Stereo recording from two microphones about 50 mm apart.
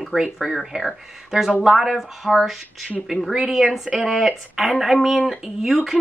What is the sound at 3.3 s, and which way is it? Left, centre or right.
A woman's voice, centre.